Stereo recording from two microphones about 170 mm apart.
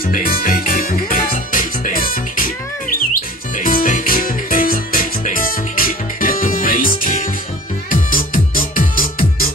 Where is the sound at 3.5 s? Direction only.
55° left (ahead or behind).